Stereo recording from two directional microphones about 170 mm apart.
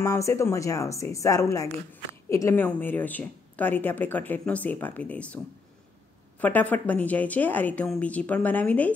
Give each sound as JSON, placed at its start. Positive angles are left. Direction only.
{"t": 0.0, "sound": "speech", "side_deg": 15}
{"t": 6.4, "sound": "speech", "side_deg": 10}